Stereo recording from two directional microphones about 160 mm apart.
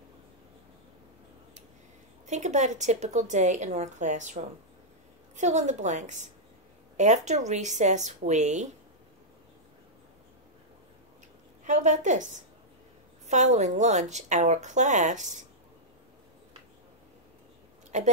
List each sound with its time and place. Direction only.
2.2 s a woman's voice: 45° right (ahead or behind)
11.6 s a woman's voice: 45° right (ahead or behind)
13.3 s a woman's voice: 45° right (ahead or behind)
17.9 s a woman's voice: 45° right (ahead or behind)